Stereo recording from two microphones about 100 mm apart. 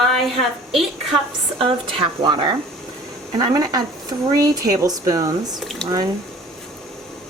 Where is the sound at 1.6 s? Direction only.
60° right (ahead or behind); by 5.6 s 35° right (ahead or behind).